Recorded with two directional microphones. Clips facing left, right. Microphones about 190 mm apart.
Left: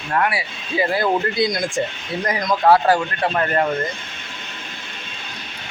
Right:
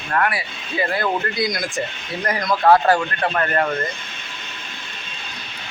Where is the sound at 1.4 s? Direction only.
25° left (ahead or behind).